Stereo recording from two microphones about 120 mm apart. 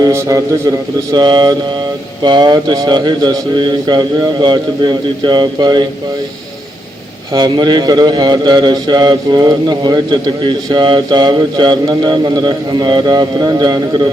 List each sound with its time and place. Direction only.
0.0 s a man's voice: 25° right (ahead or behind)
7.3 s a man's voice: 40° right (ahead or behind)